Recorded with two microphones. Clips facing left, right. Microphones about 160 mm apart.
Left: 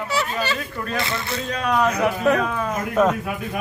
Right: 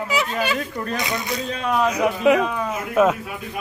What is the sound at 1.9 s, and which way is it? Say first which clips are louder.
Speech: right 2 dB; 10° right (ahead or behind).